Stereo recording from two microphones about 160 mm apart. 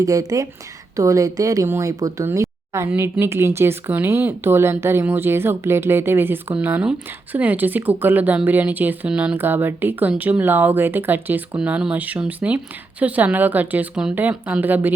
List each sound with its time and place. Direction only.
0.0 s a woman's voice: 20° right (ahead or behind)